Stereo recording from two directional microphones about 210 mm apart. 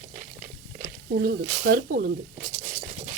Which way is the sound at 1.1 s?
60° right (ahead or behind).